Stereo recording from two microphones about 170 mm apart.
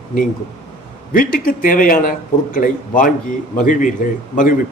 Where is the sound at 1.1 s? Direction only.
55° left (ahead or behind).